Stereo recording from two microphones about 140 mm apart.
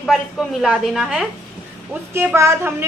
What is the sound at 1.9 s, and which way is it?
Speech, 15° right (ahead or behind).